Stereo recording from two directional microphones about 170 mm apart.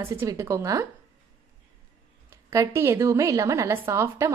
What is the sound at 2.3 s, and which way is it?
A woman's voice, 15° right (ahead or behind).